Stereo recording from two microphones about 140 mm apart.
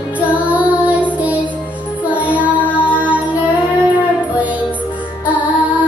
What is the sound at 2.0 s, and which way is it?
Child singing, 10° right (ahead or behind).